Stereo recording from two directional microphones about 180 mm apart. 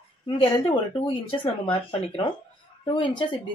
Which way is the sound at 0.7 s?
30° left (ahead or behind).